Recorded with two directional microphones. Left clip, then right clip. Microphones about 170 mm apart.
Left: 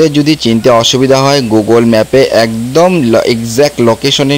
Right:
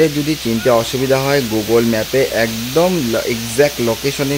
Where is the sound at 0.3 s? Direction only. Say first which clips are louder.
Left 7 dB; 35° left (ahead or behind).